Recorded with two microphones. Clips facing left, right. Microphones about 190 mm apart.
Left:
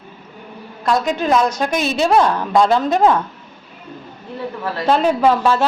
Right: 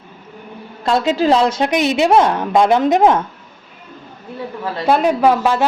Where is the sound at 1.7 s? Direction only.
20° right (ahead or behind).